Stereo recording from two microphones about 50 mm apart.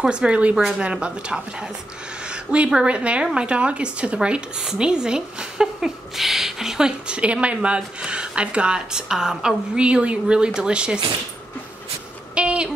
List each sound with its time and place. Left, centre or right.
0.1 s speech: right
2.2 s a sound: right
2.7 s speech: right
7.1 s speech: right
9.8 s speech: right
12.4 s a sound: right